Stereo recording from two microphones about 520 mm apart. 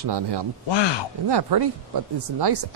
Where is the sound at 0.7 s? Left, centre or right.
Left.